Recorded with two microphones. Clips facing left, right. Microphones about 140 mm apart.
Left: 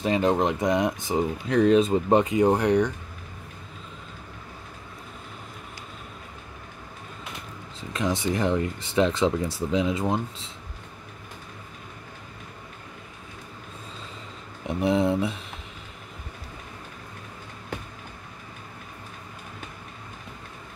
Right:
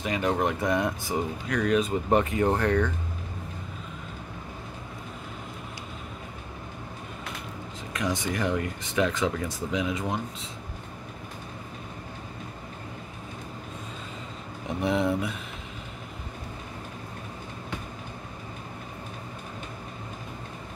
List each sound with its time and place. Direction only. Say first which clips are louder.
0.0 s speech: left 4 dB; 25° left (ahead or behind)
7.9 s speech: left 3 dB; 30° left (ahead or behind)
14.9 s speech: left 3 dB; 25° left (ahead or behind)